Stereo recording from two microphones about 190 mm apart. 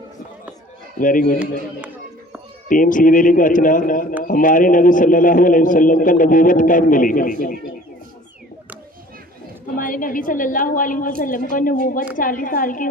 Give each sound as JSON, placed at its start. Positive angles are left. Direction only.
{"t": 0.9, "sound": "a man's voice", "side_deg": 45}
{"t": 1.4, "sound": "a sound", "side_deg": -10}
{"t": 2.6, "sound": "a man's voice", "side_deg": 45}
{"t": 9.7, "sound": "a man's voice", "side_deg": 45}